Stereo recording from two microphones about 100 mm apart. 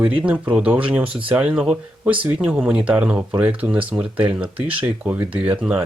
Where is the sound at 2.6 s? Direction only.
15° right (ahead or behind).